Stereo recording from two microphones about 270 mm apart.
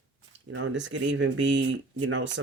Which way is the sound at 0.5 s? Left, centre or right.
Right.